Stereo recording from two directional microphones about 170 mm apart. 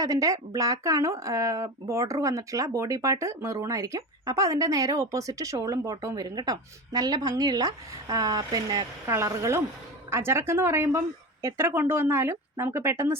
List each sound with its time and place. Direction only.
0.0 s speech: 20° right (ahead or behind)